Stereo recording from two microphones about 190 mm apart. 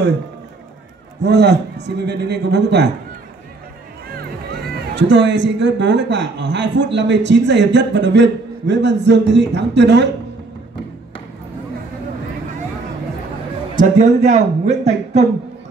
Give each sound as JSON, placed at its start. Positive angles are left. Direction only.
{"t": 1.2, "sound": "a man's voice", "side_deg": -60}
{"t": 4.7, "sound": "a man's voice", "side_deg": -70}
{"t": 13.7, "sound": "speech", "side_deg": -40}